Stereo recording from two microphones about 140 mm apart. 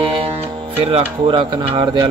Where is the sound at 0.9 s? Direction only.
35° right (ahead or behind).